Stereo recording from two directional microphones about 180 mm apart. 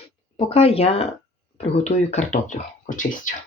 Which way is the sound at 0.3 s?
35° left (ahead or behind).